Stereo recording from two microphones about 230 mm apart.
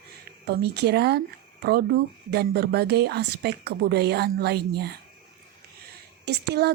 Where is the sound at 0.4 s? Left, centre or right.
Right.